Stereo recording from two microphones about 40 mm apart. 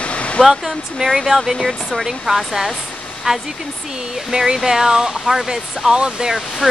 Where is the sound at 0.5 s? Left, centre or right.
Centre.